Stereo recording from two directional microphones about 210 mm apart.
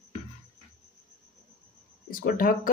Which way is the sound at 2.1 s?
40° left (ahead or behind).